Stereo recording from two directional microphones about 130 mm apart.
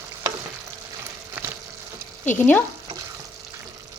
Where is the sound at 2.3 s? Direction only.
15° left (ahead or behind).